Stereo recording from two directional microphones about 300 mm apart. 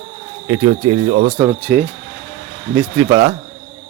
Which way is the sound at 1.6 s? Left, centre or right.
Centre.